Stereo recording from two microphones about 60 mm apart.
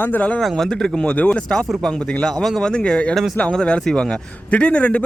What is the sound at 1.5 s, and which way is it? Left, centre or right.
Speech, centre.